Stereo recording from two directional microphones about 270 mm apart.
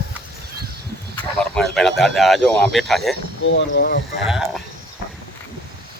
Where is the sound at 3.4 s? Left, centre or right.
Left.